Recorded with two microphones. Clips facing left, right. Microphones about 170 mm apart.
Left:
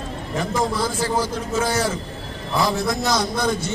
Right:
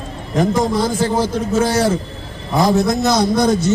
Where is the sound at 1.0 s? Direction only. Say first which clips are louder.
Right 5 dB; 30° right (ahead or behind).